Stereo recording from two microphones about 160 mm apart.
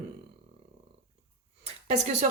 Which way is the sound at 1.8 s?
45° right (ahead or behind).